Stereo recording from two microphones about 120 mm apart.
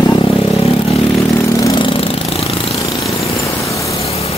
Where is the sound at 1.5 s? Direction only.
30° left (ahead or behind).